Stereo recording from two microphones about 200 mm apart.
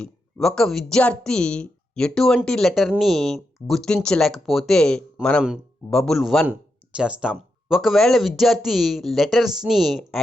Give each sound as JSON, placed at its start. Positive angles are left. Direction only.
{"t": 0.0, "sound": "a woman's voice", "side_deg": 5}